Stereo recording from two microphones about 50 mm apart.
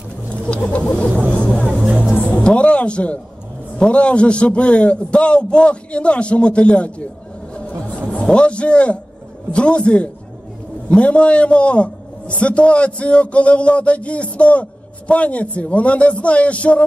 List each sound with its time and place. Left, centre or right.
0.5 s vehicle: left
2.3 s a man's voice: left
7.5 s a sound: left
8.1 s a man's voice: centre